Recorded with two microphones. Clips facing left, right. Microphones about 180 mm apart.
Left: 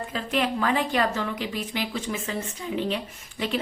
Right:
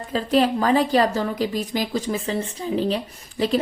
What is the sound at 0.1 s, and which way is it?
A woman's voice, 35° right (ahead or behind).